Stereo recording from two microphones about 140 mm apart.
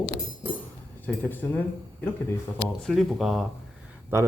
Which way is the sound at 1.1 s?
10° left (ahead or behind).